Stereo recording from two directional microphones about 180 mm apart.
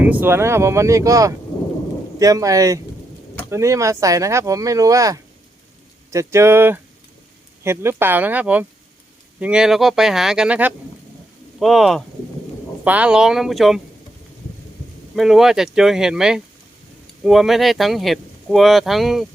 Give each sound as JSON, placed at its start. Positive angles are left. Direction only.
{"t": 0.0, "sound": "speech", "side_deg": -10}
{"t": 15.1, "sound": "speech", "side_deg": 0}